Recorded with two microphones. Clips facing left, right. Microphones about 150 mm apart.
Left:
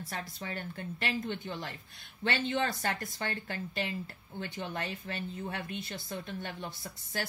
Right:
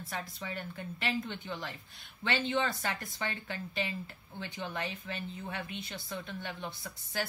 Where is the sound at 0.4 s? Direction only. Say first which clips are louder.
Left 1 dB; 50° left (ahead or behind).